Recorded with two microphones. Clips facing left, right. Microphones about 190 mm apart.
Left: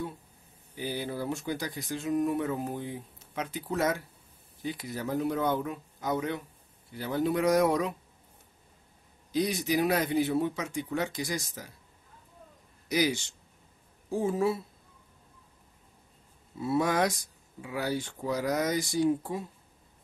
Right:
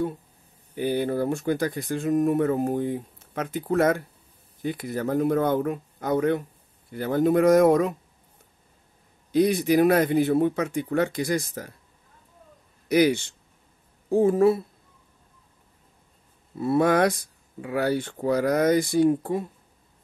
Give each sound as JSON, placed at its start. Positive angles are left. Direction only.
{"t": 0.7, "sound": "speech", "side_deg": -55}
{"t": 9.3, "sound": "speech", "side_deg": -55}
{"t": 12.8, "sound": "speech", "side_deg": -60}
{"t": 16.5, "sound": "speech", "side_deg": -55}